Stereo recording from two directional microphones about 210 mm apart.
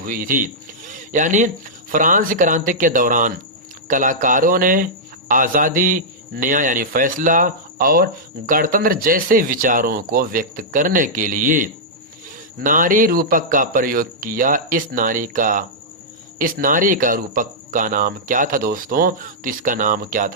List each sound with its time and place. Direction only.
0.0 s speech: 40° right (ahead or behind)
0.9 s a sound: 35° right (ahead or behind)
1.9 s speech: 40° right (ahead or behind)